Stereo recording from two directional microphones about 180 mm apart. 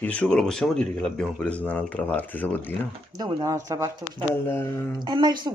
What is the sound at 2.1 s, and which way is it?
Speech, 10° left (ahead or behind).